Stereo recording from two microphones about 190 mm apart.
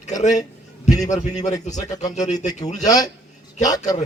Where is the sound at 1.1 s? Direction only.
40° left (ahead or behind).